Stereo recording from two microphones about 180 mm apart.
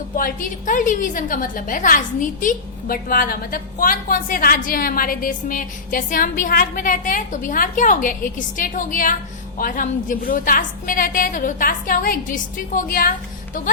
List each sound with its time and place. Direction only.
0.2 s a woman's voice: 45° left (ahead or behind)